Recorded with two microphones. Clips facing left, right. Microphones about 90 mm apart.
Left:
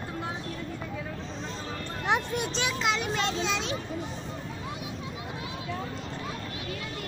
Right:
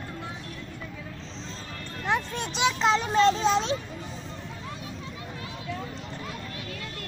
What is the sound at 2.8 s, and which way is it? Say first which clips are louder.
Children playing: right 9 dB; 35° right (ahead or behind).